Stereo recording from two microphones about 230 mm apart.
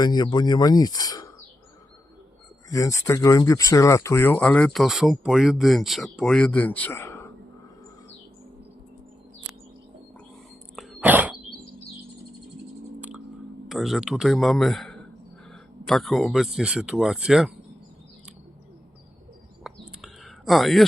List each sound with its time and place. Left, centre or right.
0.0 s speech: centre
2.6 s speech: centre
10.8 s dog: centre
13.0 s a sound: centre
13.7 s speech: centre
19.6 s bird: centre